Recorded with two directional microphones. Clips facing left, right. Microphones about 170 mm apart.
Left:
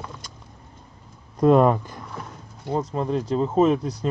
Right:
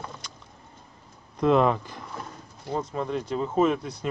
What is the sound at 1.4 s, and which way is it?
Speech, 45° left (ahead or behind).